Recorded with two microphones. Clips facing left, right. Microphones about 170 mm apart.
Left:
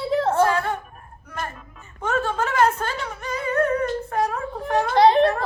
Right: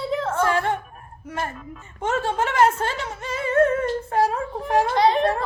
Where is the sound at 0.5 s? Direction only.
25° right (ahead or behind).